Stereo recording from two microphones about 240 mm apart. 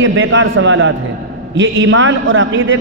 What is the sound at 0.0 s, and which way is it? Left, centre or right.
A man's voice, right.